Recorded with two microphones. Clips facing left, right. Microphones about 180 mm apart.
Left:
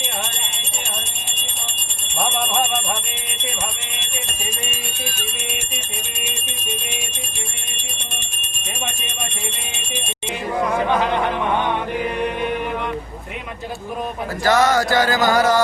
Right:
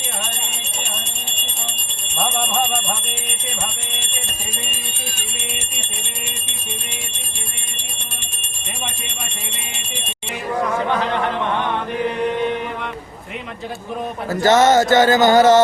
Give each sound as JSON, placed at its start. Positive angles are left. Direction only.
{"t": 14.4, "sound": "music", "side_deg": -25}